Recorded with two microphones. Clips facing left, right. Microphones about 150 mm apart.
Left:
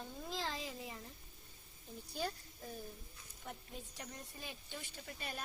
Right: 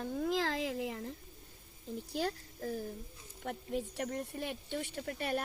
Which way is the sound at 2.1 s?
85° right.